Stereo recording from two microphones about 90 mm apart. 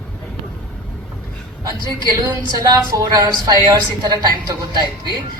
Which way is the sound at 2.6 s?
40° right (ahead or behind).